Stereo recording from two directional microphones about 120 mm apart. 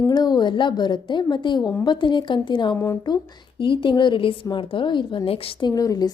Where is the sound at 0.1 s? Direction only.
35° left (ahead or behind).